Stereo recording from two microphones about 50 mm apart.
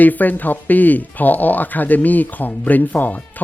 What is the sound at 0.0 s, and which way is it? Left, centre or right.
Speech, left.